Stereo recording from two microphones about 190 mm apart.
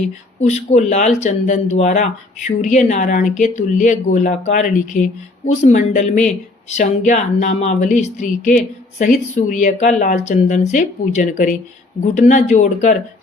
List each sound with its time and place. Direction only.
0.4 s speech: 40° left (ahead or behind)